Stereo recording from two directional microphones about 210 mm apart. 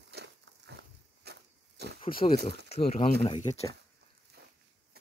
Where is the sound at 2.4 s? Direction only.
55° right (ahead or behind).